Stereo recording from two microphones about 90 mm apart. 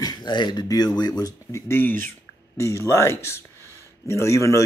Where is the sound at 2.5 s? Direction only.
35° left (ahead or behind).